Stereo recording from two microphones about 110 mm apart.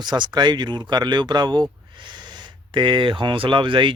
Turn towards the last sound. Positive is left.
turn(degrees=-50)  # may be behind; listen again after turning